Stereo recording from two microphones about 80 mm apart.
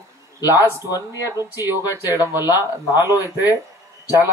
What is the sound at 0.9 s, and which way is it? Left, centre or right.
Speech, left.